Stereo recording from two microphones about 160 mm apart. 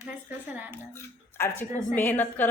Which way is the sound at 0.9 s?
15° left (ahead or behind).